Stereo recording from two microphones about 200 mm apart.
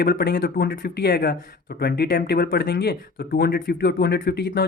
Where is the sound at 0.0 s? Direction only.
50° left (ahead or behind).